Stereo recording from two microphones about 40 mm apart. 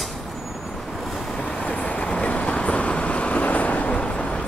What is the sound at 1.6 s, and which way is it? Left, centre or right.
Vehicle, left.